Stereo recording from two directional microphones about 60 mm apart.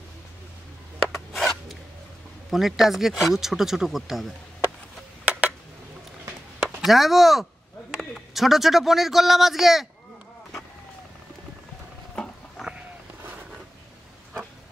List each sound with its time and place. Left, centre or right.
1.1 s filing: centre
2.5 s speech: centre
5.2 s a sound: right
6.6 s speech: centre
12.6 s sheep: centre